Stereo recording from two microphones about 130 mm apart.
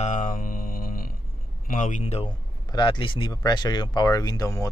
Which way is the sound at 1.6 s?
75° left (ahead or behind).